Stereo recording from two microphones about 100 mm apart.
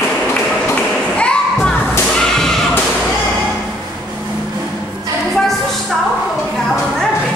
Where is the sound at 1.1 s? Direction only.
10° left (ahead or behind).